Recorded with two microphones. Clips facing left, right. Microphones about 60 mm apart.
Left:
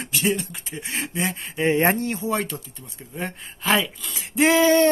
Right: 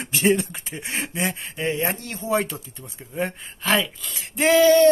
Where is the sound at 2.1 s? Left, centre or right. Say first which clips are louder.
Right 2 dB; centre.